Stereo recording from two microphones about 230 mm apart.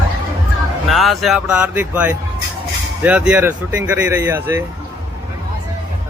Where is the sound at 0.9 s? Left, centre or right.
Centre.